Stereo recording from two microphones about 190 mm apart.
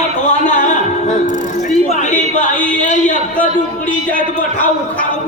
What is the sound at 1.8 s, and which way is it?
Speech, 40° left (ahead or behind).